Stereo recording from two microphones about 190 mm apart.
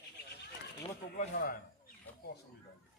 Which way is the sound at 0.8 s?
40° left (ahead or behind).